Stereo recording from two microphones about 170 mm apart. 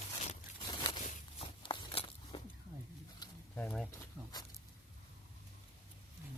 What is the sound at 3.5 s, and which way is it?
Speech, 5° left (ahead or behind).